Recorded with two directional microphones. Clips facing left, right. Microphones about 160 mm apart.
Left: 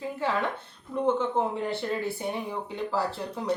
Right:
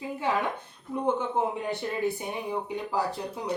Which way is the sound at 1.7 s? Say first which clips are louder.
Right 1 dB; 15° right (ahead or behind).